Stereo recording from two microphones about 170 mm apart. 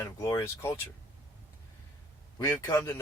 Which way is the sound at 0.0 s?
15° left (ahead or behind).